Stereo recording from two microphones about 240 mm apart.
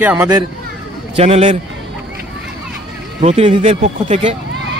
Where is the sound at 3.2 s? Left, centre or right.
Right.